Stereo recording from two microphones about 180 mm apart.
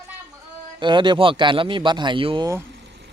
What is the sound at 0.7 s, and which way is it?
Speech, 25° right (ahead or behind).